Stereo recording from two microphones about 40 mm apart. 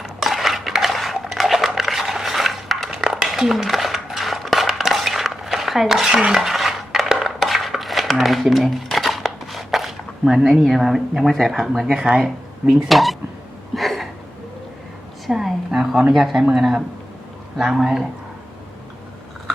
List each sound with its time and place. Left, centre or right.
0.0 s cutlery: centre
3.1 s dishes: centre
10.6 s speech: centre
11.9 s speech: right
12.9 s speech: centre
13.7 s a sound: centre
15.3 s a woman's voice: centre
15.7 s a sound: centre
16.1 s speech: centre
16.4 s speech: centre